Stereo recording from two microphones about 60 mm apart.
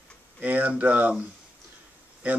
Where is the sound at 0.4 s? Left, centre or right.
Right.